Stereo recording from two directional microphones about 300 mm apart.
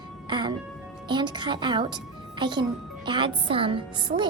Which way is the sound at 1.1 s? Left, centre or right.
Centre.